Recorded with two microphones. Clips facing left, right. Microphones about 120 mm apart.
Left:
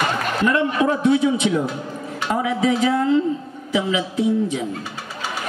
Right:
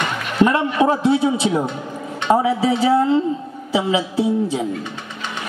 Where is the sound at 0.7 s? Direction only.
30° right (ahead or behind).